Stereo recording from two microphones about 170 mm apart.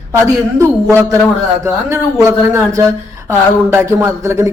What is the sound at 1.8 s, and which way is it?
A man's voice, 15° right (ahead or behind).